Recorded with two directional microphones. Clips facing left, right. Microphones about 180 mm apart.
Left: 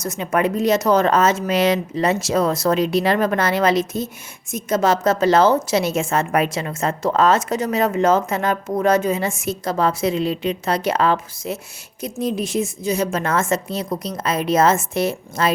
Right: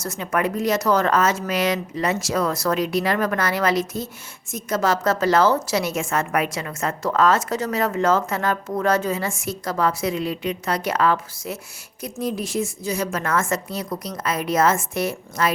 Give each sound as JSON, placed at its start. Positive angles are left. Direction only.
{"t": 0.0, "sound": "a woman's voice", "side_deg": 20}